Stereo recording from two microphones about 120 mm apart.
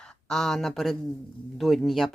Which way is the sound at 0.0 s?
5° left (ahead or behind).